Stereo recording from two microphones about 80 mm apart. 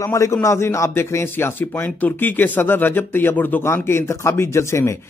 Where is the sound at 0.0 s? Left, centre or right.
Left.